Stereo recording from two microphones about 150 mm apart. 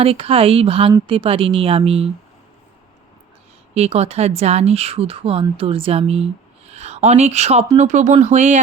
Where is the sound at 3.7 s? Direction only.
45° right (ahead or behind).